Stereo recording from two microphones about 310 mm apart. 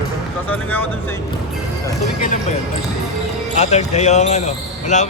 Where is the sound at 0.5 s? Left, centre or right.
Centre.